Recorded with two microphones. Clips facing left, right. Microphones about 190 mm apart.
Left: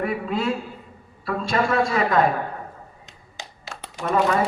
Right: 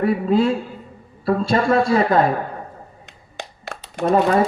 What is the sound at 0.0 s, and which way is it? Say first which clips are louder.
Speech: right 7 dB; 30° right (ahead or behind).